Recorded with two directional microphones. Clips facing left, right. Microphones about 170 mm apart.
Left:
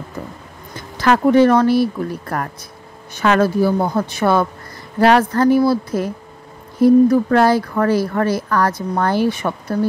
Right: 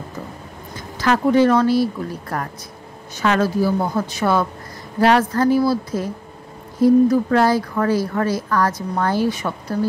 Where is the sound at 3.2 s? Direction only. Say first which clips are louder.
Left 3 dB; 55° left (ahead or behind).